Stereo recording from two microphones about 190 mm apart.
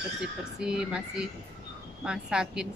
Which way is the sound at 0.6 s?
5° right (ahead or behind).